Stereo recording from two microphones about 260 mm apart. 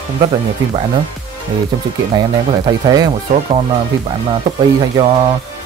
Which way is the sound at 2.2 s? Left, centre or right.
Centre.